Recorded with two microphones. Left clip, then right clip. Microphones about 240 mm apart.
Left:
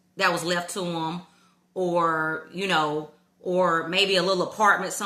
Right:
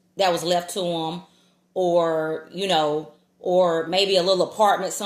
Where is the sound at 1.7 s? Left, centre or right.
Left.